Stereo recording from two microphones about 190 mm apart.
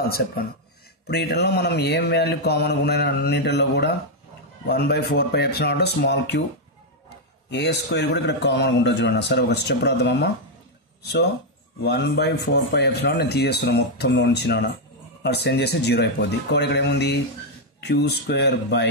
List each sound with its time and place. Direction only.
0.2 s a man's voice: 55° left (ahead or behind)
7.4 s a man's voice: 65° left (ahead or behind)